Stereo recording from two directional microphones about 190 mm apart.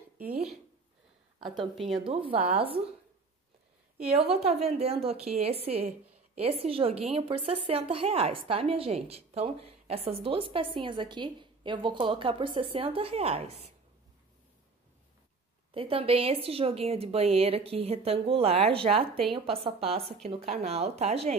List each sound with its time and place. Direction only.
1.4 s a woman's voice: centre (ahead or behind)
2.0 s speech: 30° right (ahead or behind)
2.3 s speech: 10° right (ahead or behind)
4.5 s speech: 35° right (ahead or behind)
15.7 s speech: 30° right (ahead or behind)